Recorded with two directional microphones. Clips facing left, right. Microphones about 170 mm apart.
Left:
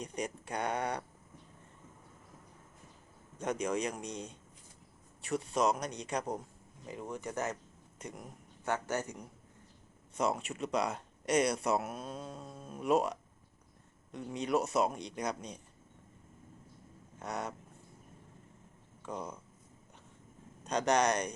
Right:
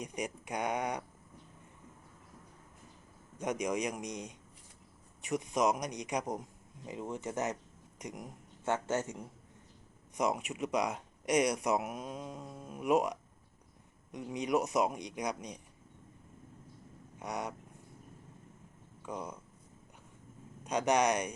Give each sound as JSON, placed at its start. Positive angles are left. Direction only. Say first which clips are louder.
{"t": 0.0, "sound": "speech", "louder": "even", "side_deg": -10}
{"t": 3.3, "sound": "a man's voice", "louder": "even", "side_deg": -15}
{"t": 10.2, "sound": "speech", "louder": "even", "side_deg": -15}
{"t": 17.2, "sound": "speech", "louder": "even", "side_deg": -15}
{"t": 19.0, "sound": "speech", "louder": "even", "side_deg": -10}
{"t": 20.7, "sound": "speech", "louder": "even", "side_deg": -10}